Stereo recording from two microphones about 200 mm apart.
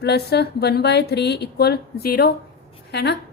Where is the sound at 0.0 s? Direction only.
55° left (ahead or behind).